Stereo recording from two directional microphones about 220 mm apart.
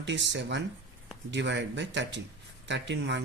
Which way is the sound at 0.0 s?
55° right (ahead or behind).